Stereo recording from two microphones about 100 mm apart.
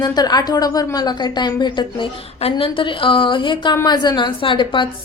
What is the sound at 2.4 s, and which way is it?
A woman's voice, 65° left (ahead or behind).